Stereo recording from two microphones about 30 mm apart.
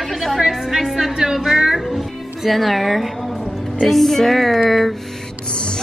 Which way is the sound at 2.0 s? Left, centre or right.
Centre.